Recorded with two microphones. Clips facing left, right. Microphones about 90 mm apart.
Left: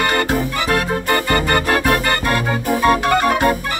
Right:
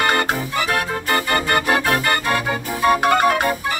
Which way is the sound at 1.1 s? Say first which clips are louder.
Left 1 dB; 15° right (ahead or behind).